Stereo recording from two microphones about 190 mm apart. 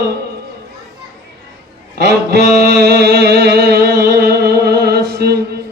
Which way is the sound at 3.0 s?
60° right (ahead or behind).